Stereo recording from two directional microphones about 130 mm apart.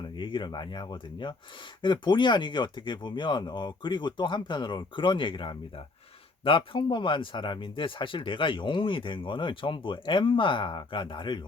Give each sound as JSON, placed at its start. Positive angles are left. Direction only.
{"t": 0.2, "sound": "speech", "side_deg": 35}